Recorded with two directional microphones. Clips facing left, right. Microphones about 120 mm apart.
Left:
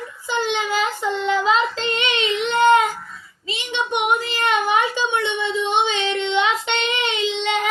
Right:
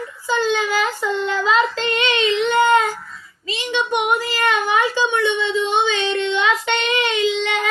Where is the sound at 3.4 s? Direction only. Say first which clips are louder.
Right 3 dB; 20° left (ahead or behind).